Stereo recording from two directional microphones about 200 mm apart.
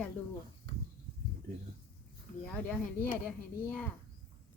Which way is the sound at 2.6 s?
5° left (ahead or behind).